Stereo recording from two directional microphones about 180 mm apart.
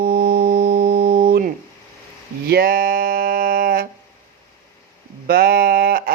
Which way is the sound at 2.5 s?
55° right (ahead or behind).